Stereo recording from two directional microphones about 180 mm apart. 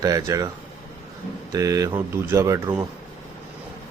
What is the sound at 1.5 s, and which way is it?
Speech, 20° right (ahead or behind).